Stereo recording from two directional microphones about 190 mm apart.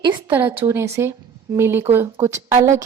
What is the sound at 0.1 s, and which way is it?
Speech, 10° right (ahead or behind).